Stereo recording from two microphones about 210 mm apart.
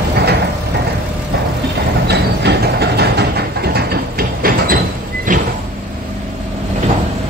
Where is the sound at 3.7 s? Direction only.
50° right (ahead or behind).